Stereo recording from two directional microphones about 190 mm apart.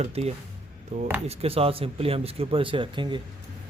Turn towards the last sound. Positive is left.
turn(degrees=-25)  # may be behind; listen again after turning